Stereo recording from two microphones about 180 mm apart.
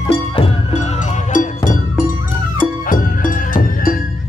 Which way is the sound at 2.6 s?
50° left (ahead or behind).